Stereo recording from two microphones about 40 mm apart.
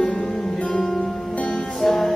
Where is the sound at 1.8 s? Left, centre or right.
Centre.